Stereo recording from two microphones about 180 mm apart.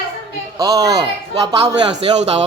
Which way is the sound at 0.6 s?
20° right (ahead or behind).